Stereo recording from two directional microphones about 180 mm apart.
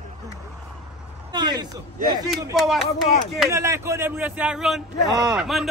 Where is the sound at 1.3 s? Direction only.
25° right (ahead or behind).